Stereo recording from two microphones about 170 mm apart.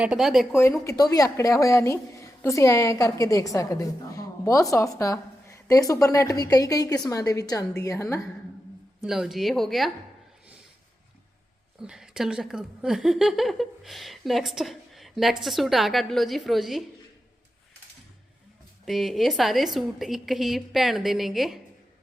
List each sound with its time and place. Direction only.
0.0 s speech: 5° right (ahead or behind)
0.9 s a woman's voice: 20° left (ahead or behind)
9.0 s speech: centre (ahead or behind)
11.8 s speech: 5° right (ahead or behind)
18.9 s speech: centre (ahead or behind)